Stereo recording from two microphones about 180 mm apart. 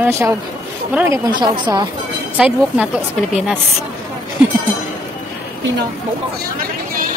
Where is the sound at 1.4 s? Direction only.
25° right (ahead or behind).